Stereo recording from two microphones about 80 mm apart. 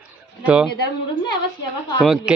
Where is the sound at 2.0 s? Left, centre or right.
Centre.